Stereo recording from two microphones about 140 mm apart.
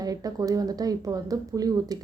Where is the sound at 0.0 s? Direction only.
25° right (ahead or behind).